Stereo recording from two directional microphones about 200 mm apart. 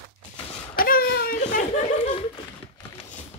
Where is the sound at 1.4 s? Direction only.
40° left (ahead or behind).